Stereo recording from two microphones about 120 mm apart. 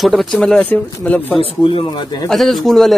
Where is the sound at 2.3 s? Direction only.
Centre (ahead or behind).